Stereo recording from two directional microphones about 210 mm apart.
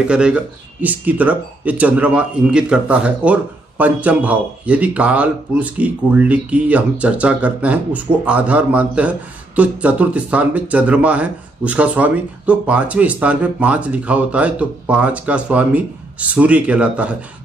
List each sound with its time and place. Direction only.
0.1 s speech: 5° right (ahead or behind)